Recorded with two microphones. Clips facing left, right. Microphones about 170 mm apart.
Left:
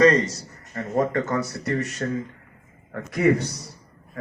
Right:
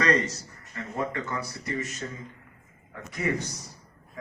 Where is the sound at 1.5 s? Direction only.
65° left (ahead or behind).